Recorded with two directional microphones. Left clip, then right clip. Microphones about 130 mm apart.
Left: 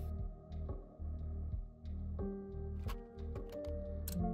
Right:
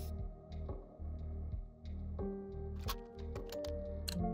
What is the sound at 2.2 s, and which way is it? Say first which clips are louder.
Music: right 2 dB; 25° right (ahead or behind).